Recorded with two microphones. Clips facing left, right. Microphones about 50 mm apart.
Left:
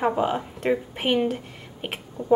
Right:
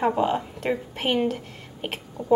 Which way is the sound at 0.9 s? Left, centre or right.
Centre.